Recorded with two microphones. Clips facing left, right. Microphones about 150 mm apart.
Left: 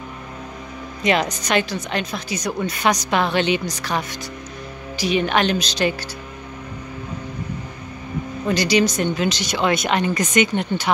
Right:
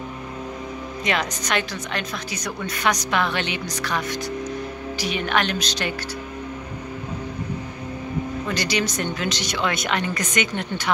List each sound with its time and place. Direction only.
1.0 s a woman's voice: 30° left (ahead or behind)
5.1 s speech: 30° left (ahead or behind)
8.5 s a woman's voice: 35° left (ahead or behind)
8.9 s speech: 20° left (ahead or behind)
9.6 s a woman's voice: 30° left (ahead or behind)